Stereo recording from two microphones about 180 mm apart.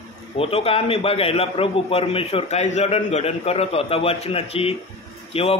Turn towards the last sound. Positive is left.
turn(degrees=30)  # may be behind; listen again after turning